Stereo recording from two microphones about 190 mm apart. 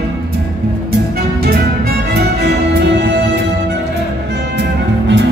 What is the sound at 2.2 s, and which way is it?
Music, 60° right (ahead or behind).